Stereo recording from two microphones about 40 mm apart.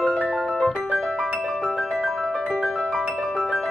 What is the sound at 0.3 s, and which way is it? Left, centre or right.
Music, centre.